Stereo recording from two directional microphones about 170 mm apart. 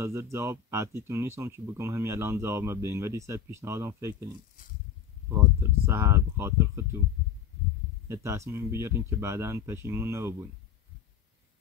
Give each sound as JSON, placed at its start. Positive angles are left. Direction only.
{"t": 0.0, "sound": "speech", "side_deg": -15}
{"t": 5.3, "sound": "speech", "side_deg": -15}
{"t": 8.1, "sound": "speech", "side_deg": -15}